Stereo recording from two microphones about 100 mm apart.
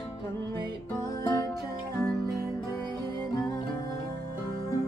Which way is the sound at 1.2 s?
35° left (ahead or behind).